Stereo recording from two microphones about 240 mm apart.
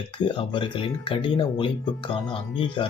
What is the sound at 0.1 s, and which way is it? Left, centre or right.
Speech, left.